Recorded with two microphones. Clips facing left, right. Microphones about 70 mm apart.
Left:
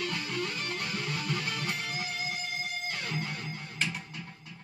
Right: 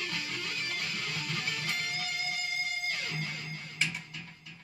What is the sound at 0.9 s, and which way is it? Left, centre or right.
Music, left.